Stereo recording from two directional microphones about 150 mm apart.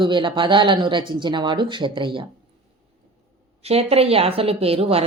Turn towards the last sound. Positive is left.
turn(degrees=-40)  # may be behind; listen again after turning